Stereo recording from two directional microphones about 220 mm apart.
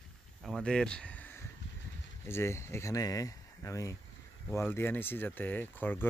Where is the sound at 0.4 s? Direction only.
Centre (ahead or behind).